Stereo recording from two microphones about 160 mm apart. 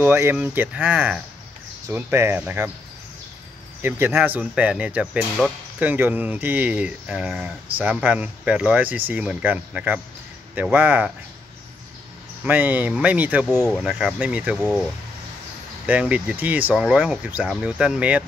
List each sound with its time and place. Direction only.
0.0 s speech: 15° right (ahead or behind)
3.8 s speech: 15° right (ahead or behind)
12.4 s speech: 10° right (ahead or behind)
15.9 s speech: 10° right (ahead or behind)